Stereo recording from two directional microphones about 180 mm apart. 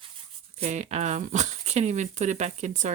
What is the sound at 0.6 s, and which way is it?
Speech, 40° right (ahead or behind).